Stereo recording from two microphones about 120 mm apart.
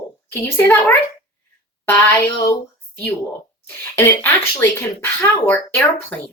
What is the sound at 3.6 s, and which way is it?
Speech, 15° left (ahead or behind).